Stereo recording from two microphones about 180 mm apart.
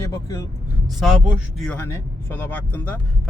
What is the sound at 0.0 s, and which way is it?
Speech, 15° left (ahead or behind).